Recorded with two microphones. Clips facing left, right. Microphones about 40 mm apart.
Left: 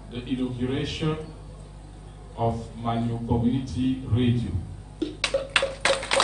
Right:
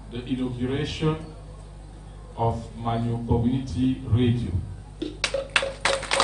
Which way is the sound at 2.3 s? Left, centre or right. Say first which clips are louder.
Right 1 dB; centre.